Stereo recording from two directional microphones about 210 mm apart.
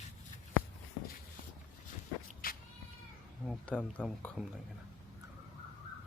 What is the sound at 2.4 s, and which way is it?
Cat, 45° left (ahead or behind).